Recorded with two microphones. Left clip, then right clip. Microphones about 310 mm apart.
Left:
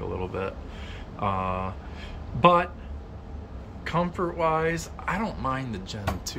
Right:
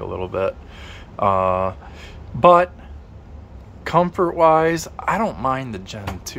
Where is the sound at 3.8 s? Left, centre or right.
Centre.